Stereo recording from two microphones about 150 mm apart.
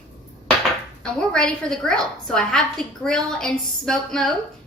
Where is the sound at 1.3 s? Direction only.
5° left (ahead or behind).